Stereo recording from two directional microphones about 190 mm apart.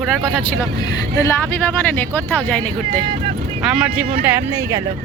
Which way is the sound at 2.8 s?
25° right (ahead or behind).